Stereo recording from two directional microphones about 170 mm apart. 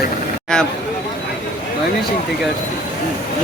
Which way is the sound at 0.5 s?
5° left (ahead or behind).